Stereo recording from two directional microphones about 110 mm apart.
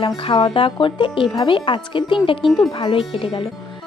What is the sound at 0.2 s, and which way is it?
Speech, 50° left (ahead or behind).